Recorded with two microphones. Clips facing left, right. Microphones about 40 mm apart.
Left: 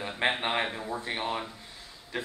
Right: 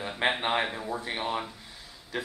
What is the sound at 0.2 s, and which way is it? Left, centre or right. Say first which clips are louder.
Speech: right 1 dB; centre.